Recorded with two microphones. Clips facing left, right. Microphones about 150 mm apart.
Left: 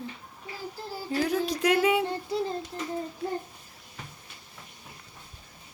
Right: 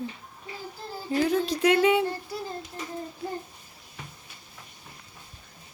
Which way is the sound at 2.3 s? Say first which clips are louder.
Left 6 dB; 25° left (ahead or behind).